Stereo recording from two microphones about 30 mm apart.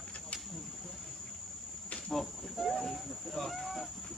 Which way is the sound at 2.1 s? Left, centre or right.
Centre.